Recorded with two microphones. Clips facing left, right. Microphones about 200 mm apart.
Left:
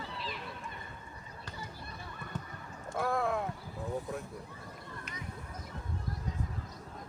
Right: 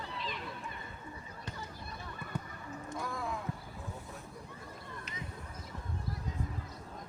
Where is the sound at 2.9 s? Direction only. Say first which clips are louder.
Left 8 dB; 60° left (ahead or behind).